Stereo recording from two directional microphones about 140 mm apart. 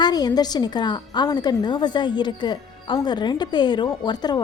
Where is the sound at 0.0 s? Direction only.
30° left (ahead or behind).